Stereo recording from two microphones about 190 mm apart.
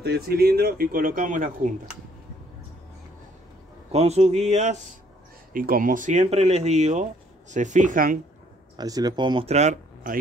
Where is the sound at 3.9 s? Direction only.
35° right (ahead or behind).